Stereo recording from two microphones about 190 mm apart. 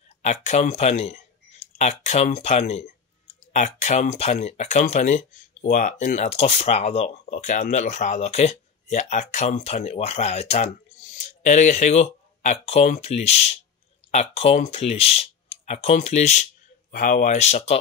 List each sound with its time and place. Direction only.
0.2 s speech: 40° left (ahead or behind)